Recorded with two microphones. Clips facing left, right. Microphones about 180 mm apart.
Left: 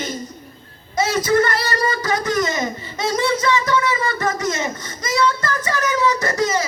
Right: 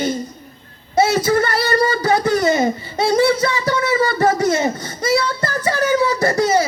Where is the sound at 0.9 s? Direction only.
30° right (ahead or behind).